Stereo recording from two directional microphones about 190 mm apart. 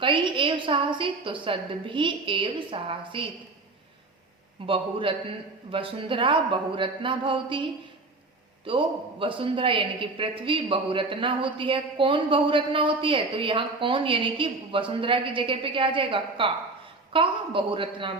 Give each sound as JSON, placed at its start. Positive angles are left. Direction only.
{"t": 0.0, "sound": "a woman's voice", "side_deg": -25}
{"t": 4.6, "sound": "a woman's voice", "side_deg": -30}